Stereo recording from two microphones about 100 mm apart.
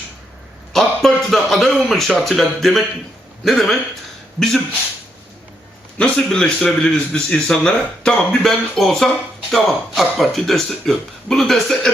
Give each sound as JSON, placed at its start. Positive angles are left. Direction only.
{"t": 0.7, "sound": "a sound", "side_deg": 0}
{"t": 2.2, "sound": "speech", "side_deg": 0}
{"t": 6.0, "sound": "a man's voice", "side_deg": 10}